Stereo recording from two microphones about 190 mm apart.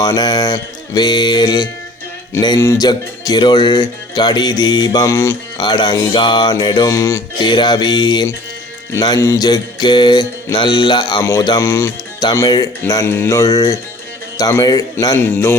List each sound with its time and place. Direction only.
0.0 s music: 20° left (ahead or behind)
12.8 s a man's voice: 15° left (ahead or behind)